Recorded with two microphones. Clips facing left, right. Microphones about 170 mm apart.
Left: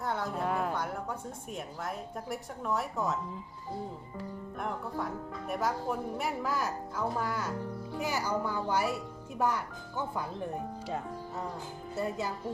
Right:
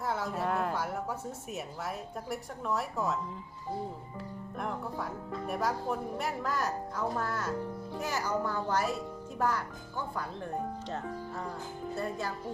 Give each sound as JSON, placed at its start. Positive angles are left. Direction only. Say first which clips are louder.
{"t": 0.0, "sound": "a sound", "louder": "even", "side_deg": -5}
{"t": 1.5, "sound": "speech", "louder": "left 1 dB", "side_deg": -5}
{"t": 4.2, "sound": "speech", "louder": "left 1 dB", "side_deg": 0}